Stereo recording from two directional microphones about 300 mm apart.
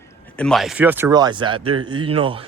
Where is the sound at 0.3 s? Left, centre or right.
Centre.